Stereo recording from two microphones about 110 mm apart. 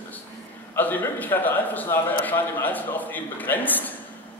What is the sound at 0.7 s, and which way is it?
A man's voice, 15° left (ahead or behind).